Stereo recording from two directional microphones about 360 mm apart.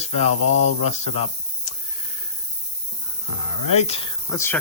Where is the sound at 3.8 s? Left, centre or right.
Centre.